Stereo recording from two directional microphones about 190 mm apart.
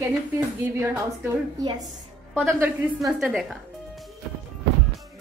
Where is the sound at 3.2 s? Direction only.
5° right (ahead or behind).